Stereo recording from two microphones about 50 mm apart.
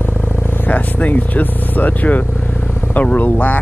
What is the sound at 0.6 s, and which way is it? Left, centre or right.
Speech, left.